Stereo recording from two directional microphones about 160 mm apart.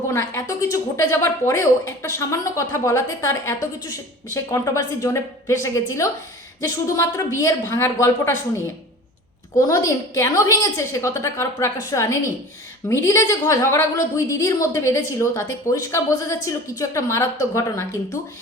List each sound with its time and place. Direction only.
0.1 s a woman's voice: 20° left (ahead or behind)